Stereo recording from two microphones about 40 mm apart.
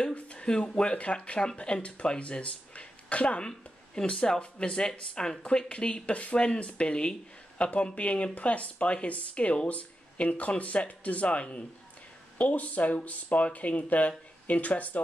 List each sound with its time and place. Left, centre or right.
0.1 s speech: left
0.9 s speech: left
3.4 s speech: left